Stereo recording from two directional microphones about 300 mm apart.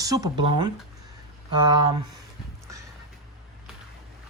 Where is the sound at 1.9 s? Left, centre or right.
Right.